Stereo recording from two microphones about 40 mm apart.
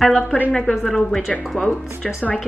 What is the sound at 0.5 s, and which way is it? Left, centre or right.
Speech, centre.